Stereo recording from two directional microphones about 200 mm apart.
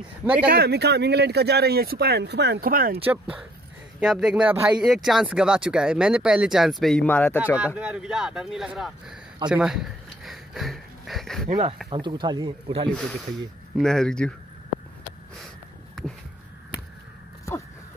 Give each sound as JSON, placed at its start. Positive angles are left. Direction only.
{"t": 0.2, "sound": "speech", "side_deg": -5}
{"t": 0.5, "sound": "speech", "side_deg": -50}
{"t": 3.1, "sound": "speech", "side_deg": -5}
{"t": 7.5, "sound": "speech", "side_deg": -5}
{"t": 9.5, "sound": "a sound", "side_deg": -5}
{"t": 11.9, "sound": "speech", "side_deg": -20}
{"t": 12.9, "sound": "speech", "side_deg": 5}